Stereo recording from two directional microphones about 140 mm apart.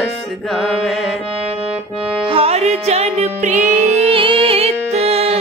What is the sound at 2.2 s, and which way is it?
Music, 45° right (ahead or behind).